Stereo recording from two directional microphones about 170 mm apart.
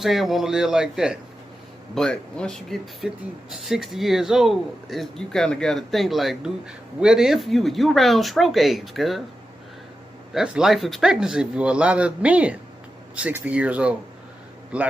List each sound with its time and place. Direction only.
0.0 s speech: centre (ahead or behind)
10.3 s speech: 5° right (ahead or behind)